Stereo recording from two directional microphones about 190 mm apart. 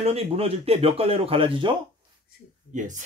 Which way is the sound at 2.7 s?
40° right (ahead or behind).